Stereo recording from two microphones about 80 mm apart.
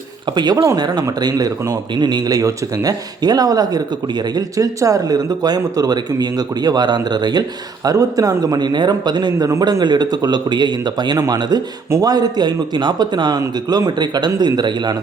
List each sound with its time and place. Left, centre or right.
0.5 s speech: right
2.0 s speech: right
7.9 s speech: right